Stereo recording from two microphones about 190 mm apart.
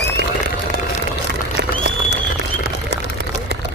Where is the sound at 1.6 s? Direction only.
60° right (ahead or behind).